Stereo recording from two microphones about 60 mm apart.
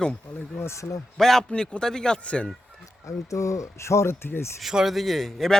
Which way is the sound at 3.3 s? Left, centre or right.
Left.